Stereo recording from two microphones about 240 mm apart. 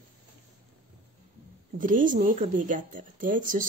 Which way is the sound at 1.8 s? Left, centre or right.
Right.